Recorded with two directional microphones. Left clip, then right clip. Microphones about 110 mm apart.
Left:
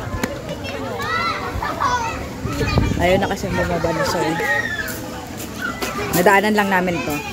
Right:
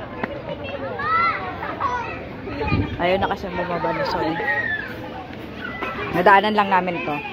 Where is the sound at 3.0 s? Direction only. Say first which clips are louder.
Left 3 dB; 70° left (ahead or behind).